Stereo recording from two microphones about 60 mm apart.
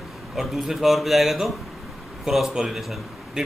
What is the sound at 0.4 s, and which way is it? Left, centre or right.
A man's voice, centre.